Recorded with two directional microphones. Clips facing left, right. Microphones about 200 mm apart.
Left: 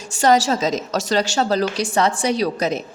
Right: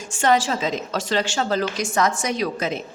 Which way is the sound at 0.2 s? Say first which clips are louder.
Left 4 dB; 40° left (ahead or behind).